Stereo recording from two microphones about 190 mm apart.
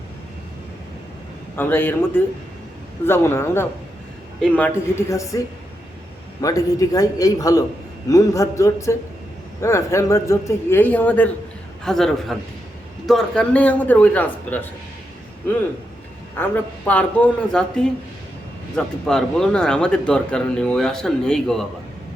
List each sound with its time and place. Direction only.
1.5 s a man's voice: 10° left (ahead or behind)
6.4 s a man's voice: 20° left (ahead or behind)
16.4 s a man's voice: 10° left (ahead or behind)